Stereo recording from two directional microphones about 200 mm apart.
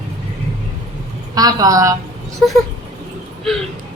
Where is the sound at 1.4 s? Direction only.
20° right (ahead or behind).